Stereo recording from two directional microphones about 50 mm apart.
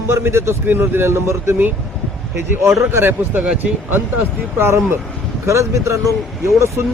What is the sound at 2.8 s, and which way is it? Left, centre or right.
Speech, right.